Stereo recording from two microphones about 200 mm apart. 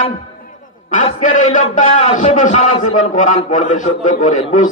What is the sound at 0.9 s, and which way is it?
A man's voice, 40° left (ahead or behind).